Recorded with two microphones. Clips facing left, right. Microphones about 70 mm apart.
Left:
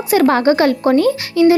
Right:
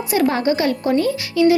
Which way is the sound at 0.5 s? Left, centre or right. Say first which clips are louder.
Left 5 dB; left.